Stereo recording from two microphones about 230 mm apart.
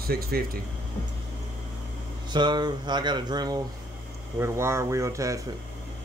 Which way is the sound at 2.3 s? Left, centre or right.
Centre.